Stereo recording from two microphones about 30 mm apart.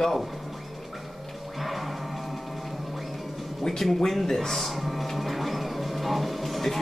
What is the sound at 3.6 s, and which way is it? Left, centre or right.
Speech, left.